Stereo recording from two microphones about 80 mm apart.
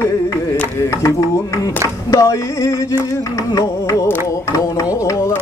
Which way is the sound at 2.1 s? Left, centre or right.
Left.